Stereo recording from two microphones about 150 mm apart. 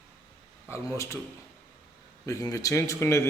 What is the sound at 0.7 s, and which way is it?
Speech, 20° left (ahead or behind).